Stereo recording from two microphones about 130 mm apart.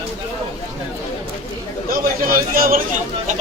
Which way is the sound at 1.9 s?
90° right.